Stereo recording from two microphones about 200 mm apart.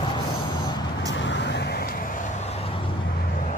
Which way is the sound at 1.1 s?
65° left (ahead or behind).